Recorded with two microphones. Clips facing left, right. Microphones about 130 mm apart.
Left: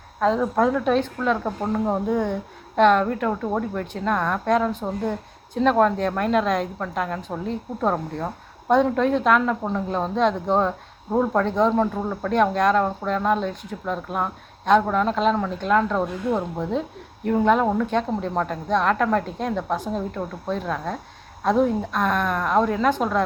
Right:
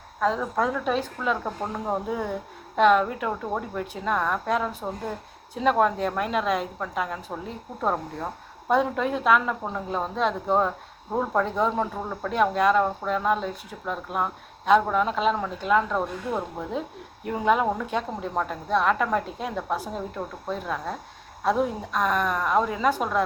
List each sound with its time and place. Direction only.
0.3 s a woman's voice: 5° left (ahead or behind)
0.9 s speech: 5° right (ahead or behind)
8.7 s speech: 5° right (ahead or behind)